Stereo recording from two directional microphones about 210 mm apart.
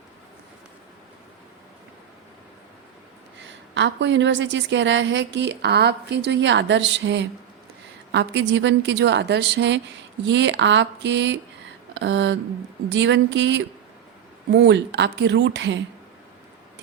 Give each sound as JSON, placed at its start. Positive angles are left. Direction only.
{"t": 3.4, "sound": "a woman's voice", "side_deg": -60}